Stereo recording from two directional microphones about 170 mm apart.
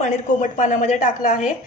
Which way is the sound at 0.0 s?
45° left (ahead or behind).